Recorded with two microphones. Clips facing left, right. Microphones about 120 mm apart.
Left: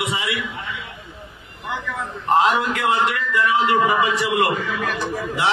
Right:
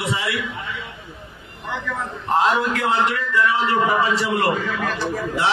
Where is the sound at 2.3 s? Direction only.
15° left (ahead or behind).